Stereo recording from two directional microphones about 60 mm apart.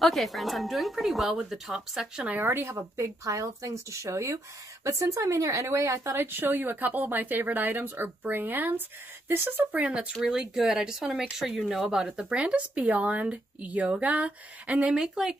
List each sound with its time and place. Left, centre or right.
0.0 s speech: centre
2.4 s speech: right
9.7 s speech: right
15.0 s speech: centre